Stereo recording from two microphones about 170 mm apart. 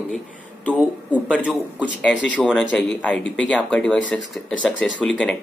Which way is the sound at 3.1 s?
90° left.